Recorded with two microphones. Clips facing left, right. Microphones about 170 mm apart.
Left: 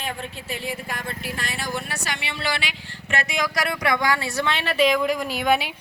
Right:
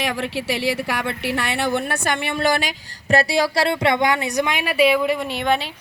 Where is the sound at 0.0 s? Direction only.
90° right; by 5.6 s 5° left (ahead or behind).